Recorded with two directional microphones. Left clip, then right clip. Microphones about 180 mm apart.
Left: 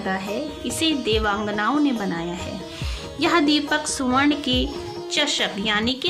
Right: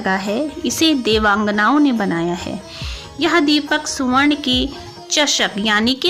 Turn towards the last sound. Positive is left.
turn(degrees=-35)  # may be behind; listen again after turning